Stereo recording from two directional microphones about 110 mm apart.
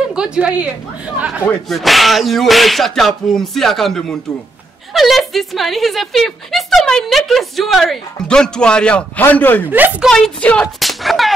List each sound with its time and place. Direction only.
0.1 s a woman's voice: 10° right (ahead or behind)
1.7 s speech: centre (ahead or behind); by 9.7 s 15° left (ahead or behind)
9.7 s a woman's voice: 15° right (ahead or behind)
10.0 s speech: 5° left (ahead or behind)
10.8 s a sound: centre (ahead or behind)